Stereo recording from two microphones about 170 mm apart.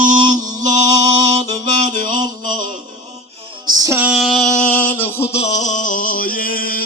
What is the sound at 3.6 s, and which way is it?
Music, 20° right (ahead or behind).